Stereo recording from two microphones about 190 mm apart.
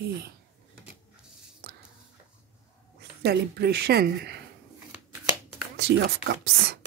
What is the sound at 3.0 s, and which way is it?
Speech, 60° right (ahead or behind).